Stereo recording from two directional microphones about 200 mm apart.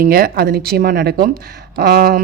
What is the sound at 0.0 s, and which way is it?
Speech, 45° right (ahead or behind).